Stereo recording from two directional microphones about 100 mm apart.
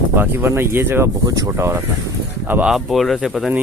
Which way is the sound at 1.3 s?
35° right (ahead or behind).